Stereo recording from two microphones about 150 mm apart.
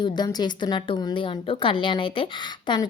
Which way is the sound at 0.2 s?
30° left (ahead or behind).